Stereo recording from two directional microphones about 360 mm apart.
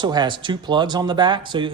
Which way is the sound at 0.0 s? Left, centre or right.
Centre.